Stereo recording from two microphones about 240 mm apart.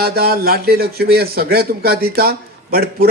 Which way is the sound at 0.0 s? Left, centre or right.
Right.